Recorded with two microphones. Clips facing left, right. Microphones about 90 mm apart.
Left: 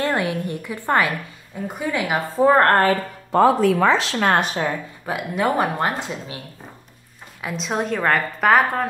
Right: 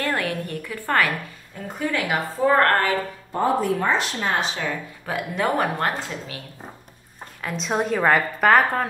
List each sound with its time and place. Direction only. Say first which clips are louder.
0.0 s a woman's voice: left 3 dB; 20° left (ahead or behind); by 3.0 s 35° left (ahead or behind)
3.3 s speech: left 7 dB; 90° left; by 4.6 s 55° left (ahead or behind)
5.0 s speech: left 2 dB; 10° left (ahead or behind)
7.4 s a woman's voice: even; centre (ahead or behind)